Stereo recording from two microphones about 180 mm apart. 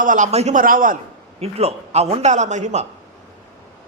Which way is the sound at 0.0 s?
45° right (ahead or behind).